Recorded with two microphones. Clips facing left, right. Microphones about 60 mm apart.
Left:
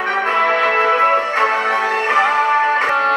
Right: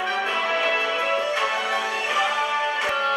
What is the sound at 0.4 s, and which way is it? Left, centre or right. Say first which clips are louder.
Music: left 10 dB; left.